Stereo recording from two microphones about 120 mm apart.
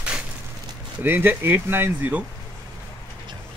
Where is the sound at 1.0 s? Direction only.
15° right (ahead or behind).